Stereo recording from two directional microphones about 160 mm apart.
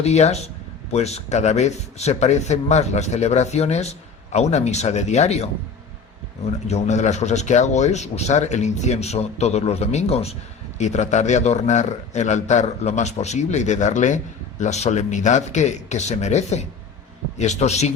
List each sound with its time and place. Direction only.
0.0 s speech: 45° left (ahead or behind)
6.7 s speech: 45° left (ahead or behind)